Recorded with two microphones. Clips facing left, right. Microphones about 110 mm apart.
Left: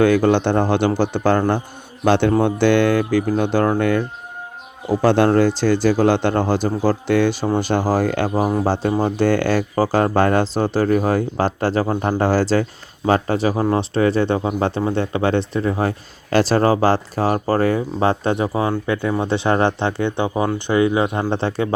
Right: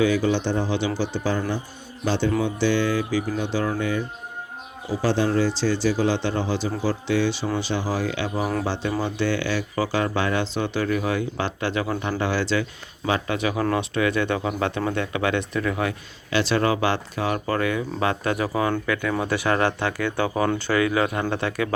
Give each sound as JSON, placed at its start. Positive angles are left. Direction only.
{"t": 0.0, "sound": "speech", "side_deg": 55}